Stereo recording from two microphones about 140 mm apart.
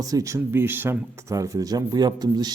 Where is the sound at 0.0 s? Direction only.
25° right (ahead or behind).